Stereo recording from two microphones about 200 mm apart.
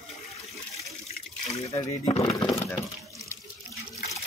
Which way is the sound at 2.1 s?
30° left (ahead or behind).